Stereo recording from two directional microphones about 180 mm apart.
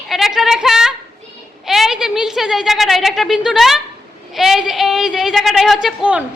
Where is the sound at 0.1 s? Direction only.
Centre (ahead or behind).